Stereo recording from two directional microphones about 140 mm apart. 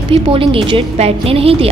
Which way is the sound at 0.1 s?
40° right (ahead or behind).